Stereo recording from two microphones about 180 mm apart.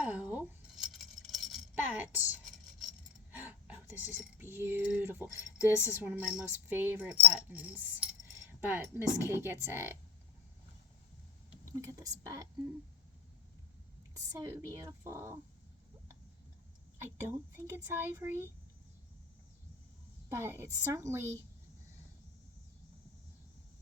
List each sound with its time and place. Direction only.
0.0 s a sound: 10° right (ahead or behind)
1.3 s coin: 5° right (ahead or behind)
3.3 s speech: 10° right (ahead or behind)
11.6 s a woman's voice: 15° right (ahead or behind)
14.1 s speech: 15° right (ahead or behind)
17.0 s speech: 15° right (ahead or behind)
20.3 s speech: 15° right (ahead or behind)